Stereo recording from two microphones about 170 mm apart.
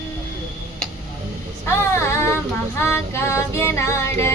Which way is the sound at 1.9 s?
15° left (ahead or behind).